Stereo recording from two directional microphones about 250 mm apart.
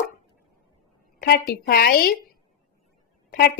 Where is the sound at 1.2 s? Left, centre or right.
Left.